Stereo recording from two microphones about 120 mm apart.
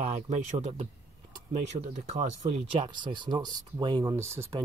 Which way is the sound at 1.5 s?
85° right.